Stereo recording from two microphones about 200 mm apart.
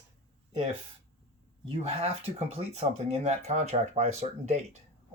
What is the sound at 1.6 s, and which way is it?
Speech, 30° right (ahead or behind).